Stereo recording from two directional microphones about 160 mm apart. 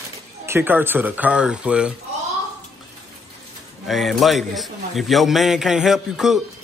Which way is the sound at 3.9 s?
Centre (ahead or behind).